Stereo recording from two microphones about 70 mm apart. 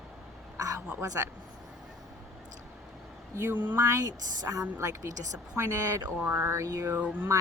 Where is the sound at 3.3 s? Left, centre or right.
Right.